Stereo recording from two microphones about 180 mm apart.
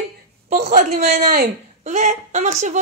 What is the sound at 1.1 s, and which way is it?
Speech, 60° right (ahead or behind).